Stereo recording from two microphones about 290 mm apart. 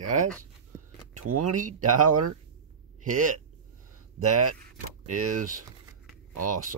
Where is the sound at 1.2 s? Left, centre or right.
Right.